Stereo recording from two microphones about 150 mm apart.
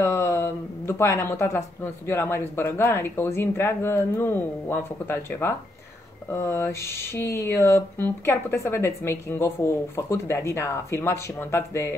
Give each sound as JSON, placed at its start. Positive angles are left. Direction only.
{"t": 0.0, "sound": "speech", "side_deg": 15}